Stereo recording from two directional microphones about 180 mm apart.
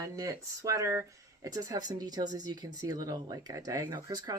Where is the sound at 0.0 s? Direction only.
20° right (ahead or behind).